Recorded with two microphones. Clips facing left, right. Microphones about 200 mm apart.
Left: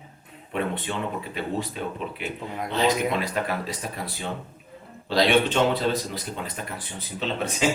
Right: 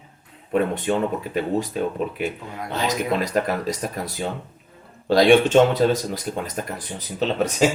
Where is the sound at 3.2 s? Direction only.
40° right (ahead or behind).